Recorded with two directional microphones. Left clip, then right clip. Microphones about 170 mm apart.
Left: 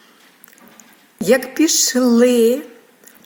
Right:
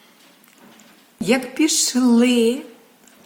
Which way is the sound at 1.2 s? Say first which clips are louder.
Left 4 dB; 15° left (ahead or behind).